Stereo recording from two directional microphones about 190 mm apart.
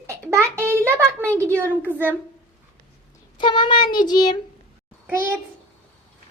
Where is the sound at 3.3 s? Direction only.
25° left (ahead or behind).